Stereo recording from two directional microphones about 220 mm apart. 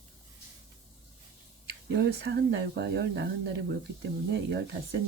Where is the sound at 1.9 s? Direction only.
50° right (ahead or behind).